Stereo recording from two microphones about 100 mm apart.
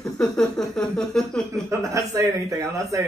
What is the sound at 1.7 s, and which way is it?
Speech, 30° right (ahead or behind).